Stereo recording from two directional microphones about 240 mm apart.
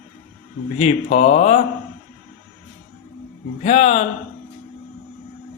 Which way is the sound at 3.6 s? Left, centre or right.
Left.